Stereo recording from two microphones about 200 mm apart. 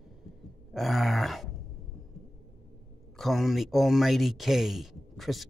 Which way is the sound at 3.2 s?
Centre (ahead or behind).